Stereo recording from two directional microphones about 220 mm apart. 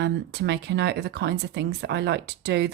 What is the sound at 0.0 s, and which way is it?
Speech, 50° right (ahead or behind).